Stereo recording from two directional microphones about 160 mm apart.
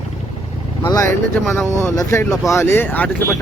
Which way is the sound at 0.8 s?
25° left (ahead or behind).